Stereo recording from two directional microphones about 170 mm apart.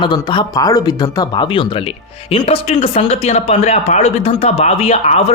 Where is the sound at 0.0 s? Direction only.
25° left (ahead or behind).